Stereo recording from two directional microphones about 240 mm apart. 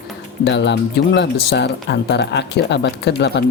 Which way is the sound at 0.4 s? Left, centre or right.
Left.